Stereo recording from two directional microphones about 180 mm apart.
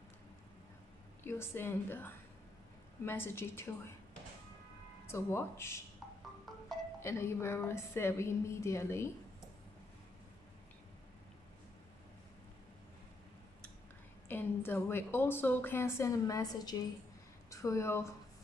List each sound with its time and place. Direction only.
1.2 s a woman's voice: 15° left (ahead or behind)
5.1 s a woman's voice: 15° left (ahead or behind)
7.0 s a woman's voice: 15° left (ahead or behind)
14.2 s a woman's voice: 10° left (ahead or behind)